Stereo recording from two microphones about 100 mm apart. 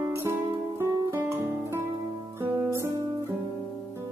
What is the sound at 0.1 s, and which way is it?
Music, 25° right (ahead or behind).